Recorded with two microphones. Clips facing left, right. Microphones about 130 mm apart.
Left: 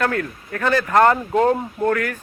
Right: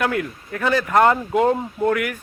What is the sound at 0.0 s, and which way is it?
Speech, 15° right (ahead or behind).